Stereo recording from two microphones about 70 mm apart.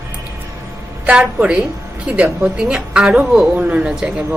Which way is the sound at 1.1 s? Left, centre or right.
Centre.